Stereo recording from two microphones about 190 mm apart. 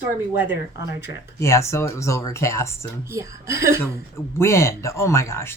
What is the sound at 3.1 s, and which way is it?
Speech, 15° right (ahead or behind).